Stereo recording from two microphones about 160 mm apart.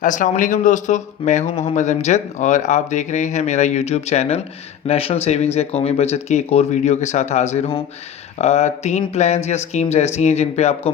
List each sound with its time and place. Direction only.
0.0 s speech: 55° left (ahead or behind)